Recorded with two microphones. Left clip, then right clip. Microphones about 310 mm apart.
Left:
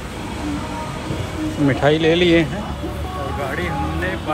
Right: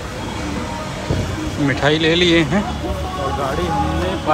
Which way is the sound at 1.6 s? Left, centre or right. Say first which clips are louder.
Even; centre.